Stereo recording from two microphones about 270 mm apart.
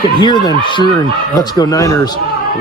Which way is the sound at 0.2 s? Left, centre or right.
Centre.